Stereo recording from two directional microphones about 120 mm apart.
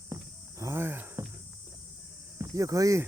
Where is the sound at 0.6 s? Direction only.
20° right (ahead or behind).